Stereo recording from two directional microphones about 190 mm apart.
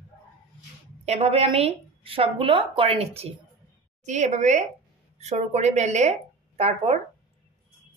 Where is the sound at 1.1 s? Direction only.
30° right (ahead or behind).